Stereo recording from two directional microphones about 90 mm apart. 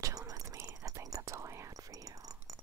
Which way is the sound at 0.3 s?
40° right (ahead or behind).